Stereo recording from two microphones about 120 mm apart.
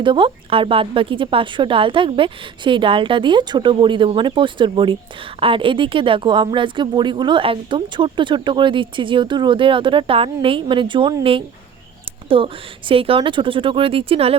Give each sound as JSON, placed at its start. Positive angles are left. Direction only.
{"t": 0.0, "sound": "speech", "side_deg": -45}